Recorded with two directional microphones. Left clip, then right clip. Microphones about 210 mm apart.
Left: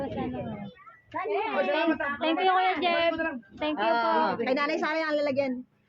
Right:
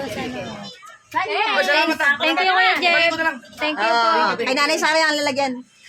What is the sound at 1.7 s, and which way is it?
A woman's voice, 15° right (ahead or behind).